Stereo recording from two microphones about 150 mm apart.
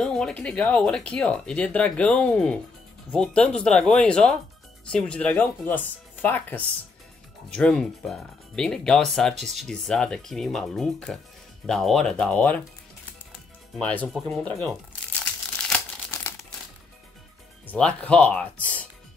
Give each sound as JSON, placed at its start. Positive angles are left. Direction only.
{"t": 0.0, "sound": "speech", "side_deg": 5}
{"t": 13.7, "sound": "speech", "side_deg": 5}
{"t": 15.5, "sound": "crumpling", "side_deg": 5}
{"t": 16.1, "sound": "crumpling", "side_deg": 20}
{"t": 17.6, "sound": "speech", "side_deg": 5}